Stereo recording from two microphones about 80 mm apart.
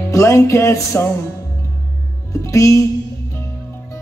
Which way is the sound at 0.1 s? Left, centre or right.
Left.